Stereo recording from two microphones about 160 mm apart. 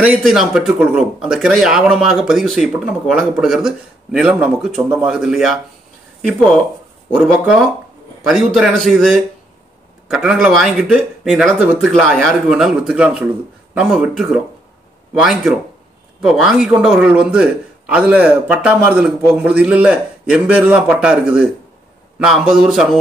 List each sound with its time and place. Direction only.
0.2 s speech: centre (ahead or behind)
7.2 s speech: 5° right (ahead or behind)
16.2 s a man's voice: centre (ahead or behind)